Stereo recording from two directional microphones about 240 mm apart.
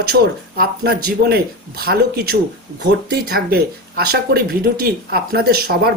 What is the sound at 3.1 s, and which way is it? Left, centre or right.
Speech, right.